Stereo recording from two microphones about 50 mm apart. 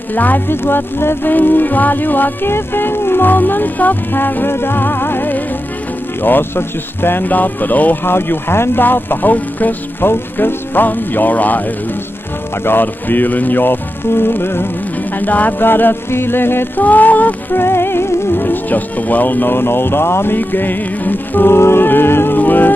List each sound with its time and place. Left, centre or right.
0.1 s speech: left
2.5 s music: left
6.2 s speech: left
8.0 s speech: left
12.6 s music: left
15.1 s music: left
16.8 s speech: left
17.6 s speech: left
20.3 s speech: left
21.5 s music: left
22.4 s music: left